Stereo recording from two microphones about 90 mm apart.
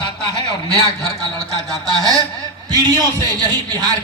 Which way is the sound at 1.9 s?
45° right (ahead or behind).